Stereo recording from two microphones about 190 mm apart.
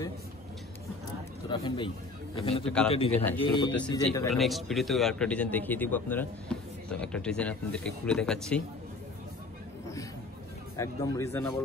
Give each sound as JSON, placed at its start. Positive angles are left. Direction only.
{"t": 1.5, "sound": "speech", "side_deg": 25}
{"t": 2.6, "sound": "a man's voice", "side_deg": 5}
{"t": 2.9, "sound": "a man's voice", "side_deg": 30}
{"t": 4.3, "sound": "a man's voice", "side_deg": 0}
{"t": 10.8, "sound": "a man's voice", "side_deg": 15}